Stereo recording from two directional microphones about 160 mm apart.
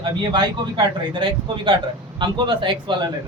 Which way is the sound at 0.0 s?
30° right (ahead or behind).